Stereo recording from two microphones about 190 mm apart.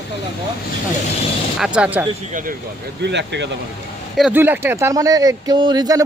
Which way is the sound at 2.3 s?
45° right (ahead or behind).